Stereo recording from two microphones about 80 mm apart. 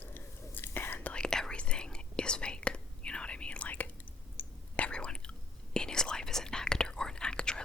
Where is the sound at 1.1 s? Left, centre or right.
Centre.